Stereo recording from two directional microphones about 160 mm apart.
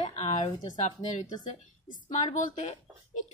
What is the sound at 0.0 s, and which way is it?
Speech, 45° left (ahead or behind).